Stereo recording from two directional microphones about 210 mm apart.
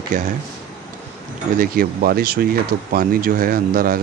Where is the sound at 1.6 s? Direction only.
45° right (ahead or behind).